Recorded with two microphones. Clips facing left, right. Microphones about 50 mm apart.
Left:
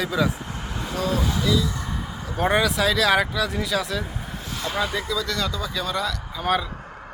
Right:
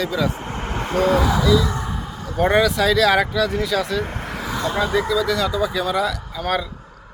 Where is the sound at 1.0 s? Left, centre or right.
Right.